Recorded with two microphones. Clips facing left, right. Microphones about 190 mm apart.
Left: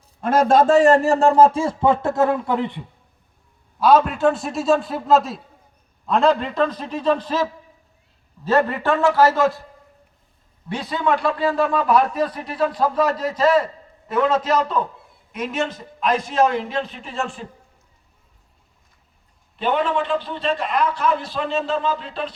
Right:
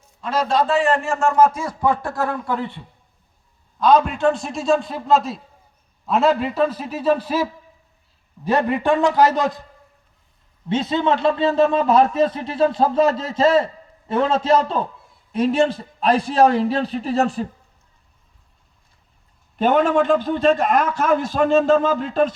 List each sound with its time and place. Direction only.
0.2 s a man's voice: 50° left (ahead or behind); by 2.8 s 20° left (ahead or behind)
3.8 s a man's voice: 5° left (ahead or behind)
8.4 s a man's voice: 15° right (ahead or behind)
10.7 s a man's voice: 25° right (ahead or behind); by 17.4 s 40° right (ahead or behind)
19.5 s a man's voice: 45° right (ahead or behind)